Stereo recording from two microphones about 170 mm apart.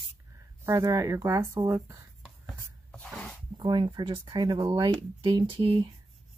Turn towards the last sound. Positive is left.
turn(degrees=-30)  # may be behind; listen again after turning